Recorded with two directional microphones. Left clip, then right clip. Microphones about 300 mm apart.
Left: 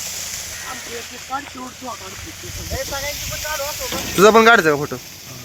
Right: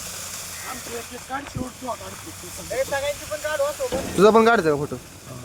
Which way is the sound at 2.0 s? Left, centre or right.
Right.